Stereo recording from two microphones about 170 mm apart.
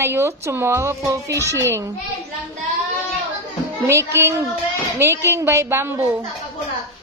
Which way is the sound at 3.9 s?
15° right (ahead or behind).